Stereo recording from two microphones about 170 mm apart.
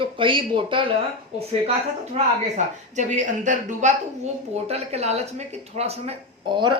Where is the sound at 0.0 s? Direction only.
30° right (ahead or behind).